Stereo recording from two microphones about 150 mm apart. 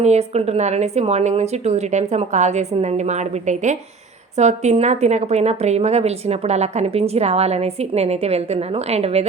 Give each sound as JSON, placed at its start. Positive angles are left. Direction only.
{"t": 0.0, "sound": "a woman's voice", "side_deg": -45}